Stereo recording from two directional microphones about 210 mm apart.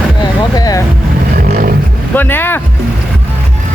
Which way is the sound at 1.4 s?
45° right (ahead or behind).